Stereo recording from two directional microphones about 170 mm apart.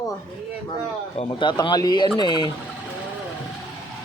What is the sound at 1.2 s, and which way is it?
Speech, 30° left (ahead or behind).